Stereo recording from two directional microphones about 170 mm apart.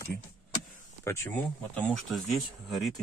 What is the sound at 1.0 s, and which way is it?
Speech, 15° left (ahead or behind).